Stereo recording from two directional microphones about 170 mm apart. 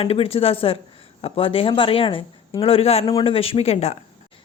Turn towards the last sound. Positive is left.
turn(degrees=40)  # may be behind; listen again after turning